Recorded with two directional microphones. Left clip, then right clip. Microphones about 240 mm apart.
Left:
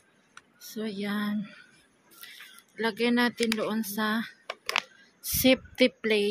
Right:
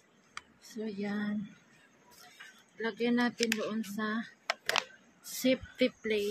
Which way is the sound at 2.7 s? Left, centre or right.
Left.